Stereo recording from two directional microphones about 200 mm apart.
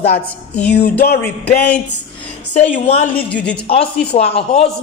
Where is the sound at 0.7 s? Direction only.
55° left (ahead or behind).